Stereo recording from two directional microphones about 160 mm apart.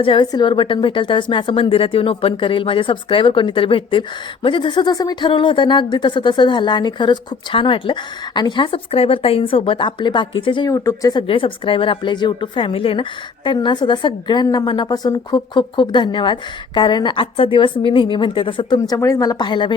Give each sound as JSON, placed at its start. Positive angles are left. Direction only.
{"t": 0.0, "sound": "a woman's voice", "side_deg": 30}
{"t": 10.7, "sound": "speech", "side_deg": 20}
{"t": 11.3, "sound": "a woman's voice", "side_deg": 35}
{"t": 18.9, "sound": "speech", "side_deg": 20}